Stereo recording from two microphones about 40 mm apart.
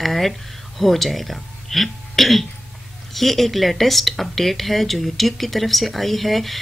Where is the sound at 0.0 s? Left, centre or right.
Centre.